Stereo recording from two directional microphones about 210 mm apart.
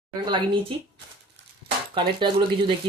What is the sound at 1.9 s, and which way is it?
Speech, 25° right (ahead or behind).